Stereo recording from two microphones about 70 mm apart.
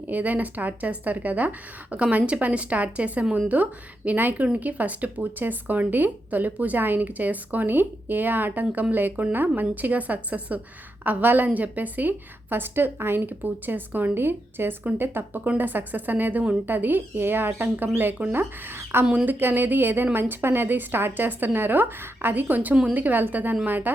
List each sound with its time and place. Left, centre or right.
0.1 s a woman's voice: right